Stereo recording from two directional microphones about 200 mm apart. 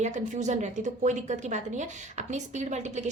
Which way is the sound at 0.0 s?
35° right (ahead or behind).